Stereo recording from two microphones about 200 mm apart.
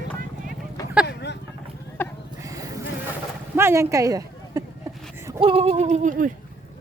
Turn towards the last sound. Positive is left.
turn(degrees=-40)  # may be behind; listen again after turning